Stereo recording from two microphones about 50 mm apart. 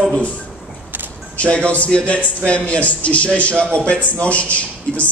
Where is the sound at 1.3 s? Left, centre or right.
Left.